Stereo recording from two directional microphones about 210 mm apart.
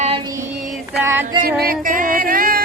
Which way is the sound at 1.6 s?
45° right (ahead or behind).